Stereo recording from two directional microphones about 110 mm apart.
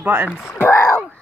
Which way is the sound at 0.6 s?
15° left (ahead or behind).